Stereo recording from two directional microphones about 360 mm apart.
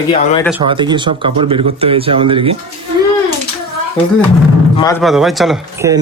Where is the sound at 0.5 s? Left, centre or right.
Centre.